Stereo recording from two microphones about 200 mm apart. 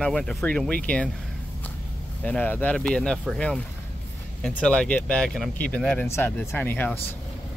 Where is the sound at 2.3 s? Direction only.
10° left (ahead or behind).